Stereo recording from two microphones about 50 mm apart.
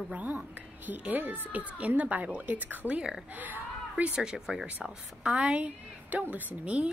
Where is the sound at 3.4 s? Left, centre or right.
Right.